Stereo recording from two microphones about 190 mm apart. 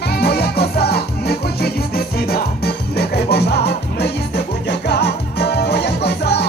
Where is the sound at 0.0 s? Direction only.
55° left (ahead or behind).